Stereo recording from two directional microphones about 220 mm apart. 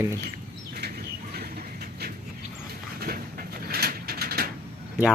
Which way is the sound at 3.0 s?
45° right (ahead or behind).